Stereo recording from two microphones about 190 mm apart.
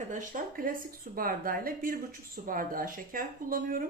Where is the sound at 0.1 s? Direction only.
45° right (ahead or behind).